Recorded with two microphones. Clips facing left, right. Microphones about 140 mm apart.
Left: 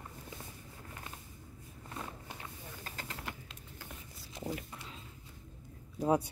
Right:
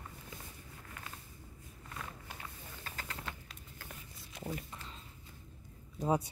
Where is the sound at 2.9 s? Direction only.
20° left (ahead or behind).